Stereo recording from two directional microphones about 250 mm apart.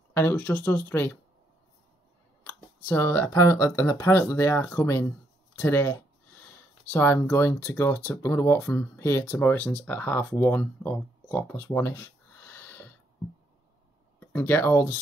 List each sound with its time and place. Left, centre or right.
0.1 s speech: centre
2.4 s speech: centre
14.2 s speech: centre